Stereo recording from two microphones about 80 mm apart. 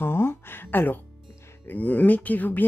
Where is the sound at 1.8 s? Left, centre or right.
Centre.